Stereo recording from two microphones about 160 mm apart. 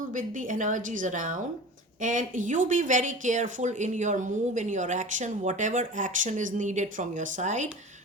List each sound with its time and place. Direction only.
0.1 s speech: 55° right (ahead or behind)